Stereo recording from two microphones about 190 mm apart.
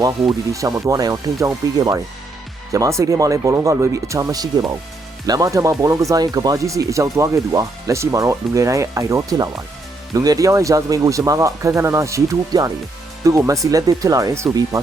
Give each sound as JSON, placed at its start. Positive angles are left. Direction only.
{"t": 0.0, "sound": "speech", "side_deg": -20}